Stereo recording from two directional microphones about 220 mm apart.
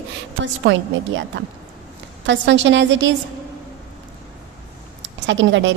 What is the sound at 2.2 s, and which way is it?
Speech, 55° right (ahead or behind).